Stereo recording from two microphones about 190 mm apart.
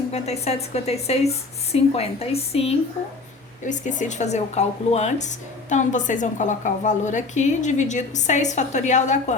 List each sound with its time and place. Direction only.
0.1 s speech: 35° left (ahead or behind)